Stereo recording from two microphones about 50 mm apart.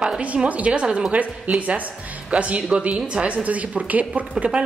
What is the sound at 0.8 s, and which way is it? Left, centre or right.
Speech, centre.